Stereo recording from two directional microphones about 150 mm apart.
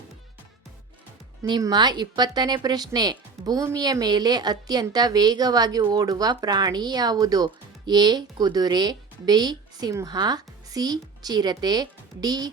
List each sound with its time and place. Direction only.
1.5 s a woman's voice: 30° right (ahead or behind)